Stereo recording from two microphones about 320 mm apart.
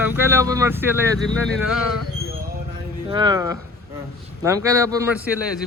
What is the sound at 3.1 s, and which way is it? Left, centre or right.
Speech, centre.